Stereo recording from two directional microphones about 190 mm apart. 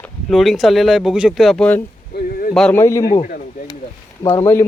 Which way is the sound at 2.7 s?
15° left (ahead or behind).